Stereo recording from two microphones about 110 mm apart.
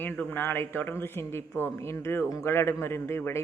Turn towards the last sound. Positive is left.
turn(degrees=25)  # may be behind; listen again after turning